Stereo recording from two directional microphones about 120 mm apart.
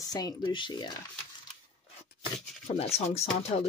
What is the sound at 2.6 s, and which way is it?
Speech, 60° left (ahead or behind).